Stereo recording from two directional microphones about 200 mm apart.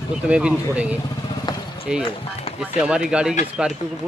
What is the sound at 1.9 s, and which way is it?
Speech, 5° right (ahead or behind).